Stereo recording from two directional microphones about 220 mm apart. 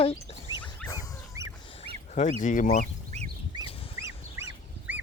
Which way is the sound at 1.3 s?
15° right (ahead or behind).